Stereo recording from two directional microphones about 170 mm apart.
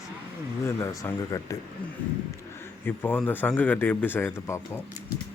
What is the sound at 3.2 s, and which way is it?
A man's voice, 10° left (ahead or behind).